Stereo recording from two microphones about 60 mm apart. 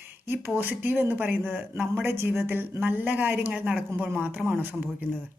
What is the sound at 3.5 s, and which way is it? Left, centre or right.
Speech, right.